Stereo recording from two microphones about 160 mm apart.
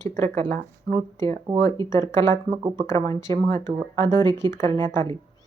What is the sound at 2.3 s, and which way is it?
Speech, 25° right (ahead or behind).